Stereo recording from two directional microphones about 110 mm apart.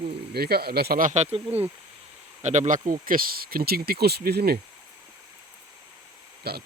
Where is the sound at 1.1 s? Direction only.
90° right.